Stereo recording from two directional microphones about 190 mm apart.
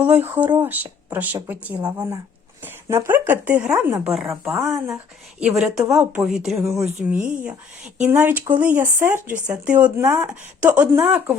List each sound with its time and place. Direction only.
0.0 s speech: 10° right (ahead or behind)
1.8 s a woman's voice: 20° right (ahead or behind); by 6.4 s 5° right (ahead or behind)
6.6 s speech: 15° right (ahead or behind)